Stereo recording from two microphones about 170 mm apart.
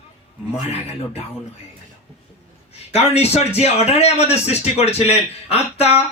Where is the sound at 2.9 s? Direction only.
35° left (ahead or behind).